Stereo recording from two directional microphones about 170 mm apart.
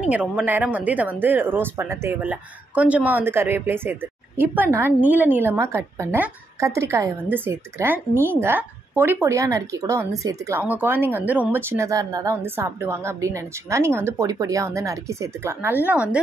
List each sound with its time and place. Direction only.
0.1 s speech: 5° right (ahead or behind)